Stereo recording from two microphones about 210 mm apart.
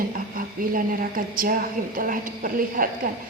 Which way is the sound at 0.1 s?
40° right (ahead or behind).